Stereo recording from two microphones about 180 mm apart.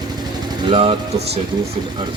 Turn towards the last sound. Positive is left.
turn(degrees=-30)  # may be behind; listen again after turning